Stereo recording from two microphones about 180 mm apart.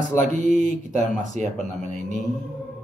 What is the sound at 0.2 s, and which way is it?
Speech, 40° right (ahead or behind).